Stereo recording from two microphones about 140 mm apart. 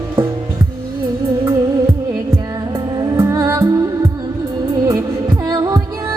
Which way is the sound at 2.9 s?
25° right (ahead or behind).